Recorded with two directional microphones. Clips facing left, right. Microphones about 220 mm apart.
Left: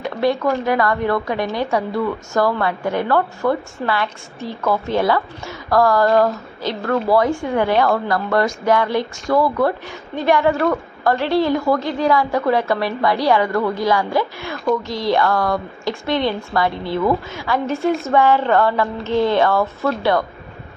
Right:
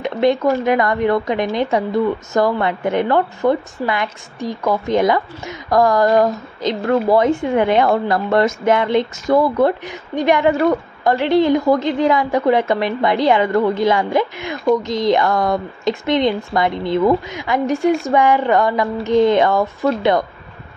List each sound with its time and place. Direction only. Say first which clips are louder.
0.0 s a woman's voice: right 3 dB; 20° right (ahead or behind)